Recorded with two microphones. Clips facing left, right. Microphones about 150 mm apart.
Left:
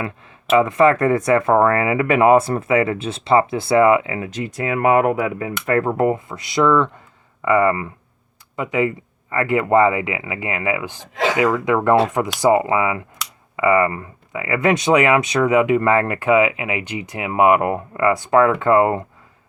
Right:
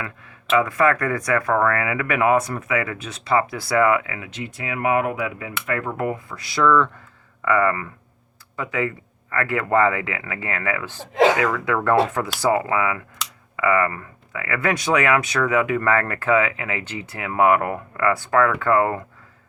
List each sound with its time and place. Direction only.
0.0 s speech: 25° left (ahead or behind)
4.3 s speech: 40° left (ahead or behind); by 19.0 s 20° left (ahead or behind)